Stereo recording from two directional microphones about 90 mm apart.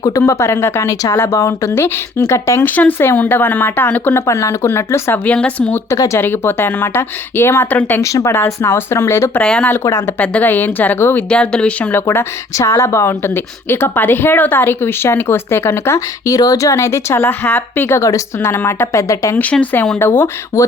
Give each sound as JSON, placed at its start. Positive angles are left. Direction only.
{"t": 0.2, "sound": "a woman's voice", "side_deg": 30}
{"t": 2.6, "sound": "speech", "side_deg": 20}
{"t": 4.3, "sound": "a woman's voice", "side_deg": 35}
{"t": 5.2, "sound": "speech", "side_deg": 15}
{"t": 5.9, "sound": "speech", "side_deg": 30}
{"t": 8.0, "sound": "speech", "side_deg": 35}
{"t": 9.4, "sound": "speech", "side_deg": 10}
{"t": 9.8, "sound": "a woman's voice", "side_deg": 30}
{"t": 10.2, "sound": "a woman's voice", "side_deg": 20}
{"t": 19.4, "sound": "speech", "side_deg": 15}
{"t": 20.0, "sound": "speech", "side_deg": 25}